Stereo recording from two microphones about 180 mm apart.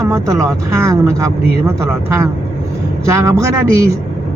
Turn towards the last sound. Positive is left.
turn(degrees=-15)  # may be behind; listen again after turning